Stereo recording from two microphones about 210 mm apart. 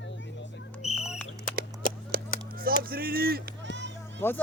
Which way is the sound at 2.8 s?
45° right (ahead or behind).